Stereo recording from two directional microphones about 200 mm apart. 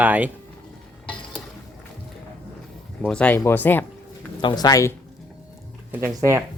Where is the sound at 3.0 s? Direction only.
5° left (ahead or behind).